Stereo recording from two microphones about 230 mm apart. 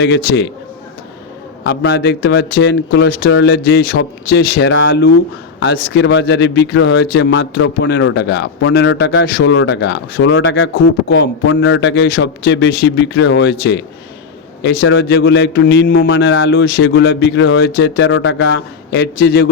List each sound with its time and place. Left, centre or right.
0.0 s a man's voice: left
1.6 s a man's voice: left